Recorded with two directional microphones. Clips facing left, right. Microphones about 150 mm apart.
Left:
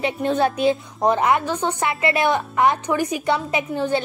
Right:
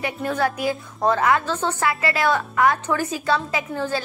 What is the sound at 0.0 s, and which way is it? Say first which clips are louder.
A woman's voice: left 3 dB; 25° left (ahead or behind).